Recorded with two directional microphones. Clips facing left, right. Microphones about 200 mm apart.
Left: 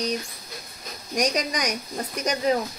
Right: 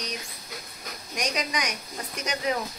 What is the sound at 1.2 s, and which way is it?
Speech, 40° left (ahead or behind).